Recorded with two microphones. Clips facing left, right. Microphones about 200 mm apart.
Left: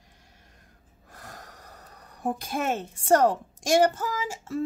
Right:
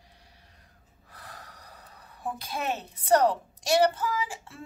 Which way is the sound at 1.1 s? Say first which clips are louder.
Left 2 dB; 45° left (ahead or behind).